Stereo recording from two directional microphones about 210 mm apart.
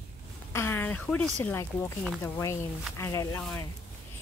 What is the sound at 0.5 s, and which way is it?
Speech, 10° left (ahead or behind).